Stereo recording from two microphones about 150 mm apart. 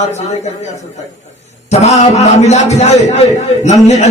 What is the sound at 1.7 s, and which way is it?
A man's voice, 50° left (ahead or behind).